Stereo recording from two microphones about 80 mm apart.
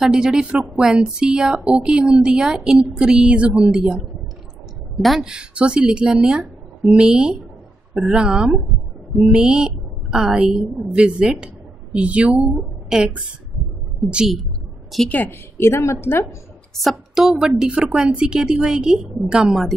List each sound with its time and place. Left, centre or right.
0.0 s a woman's voice: centre
4.9 s a woman's voice: centre
14.1 s a woman's voice: centre
15.0 s a woman's voice: left
15.5 s a woman's voice: left
16.8 s a woman's voice: centre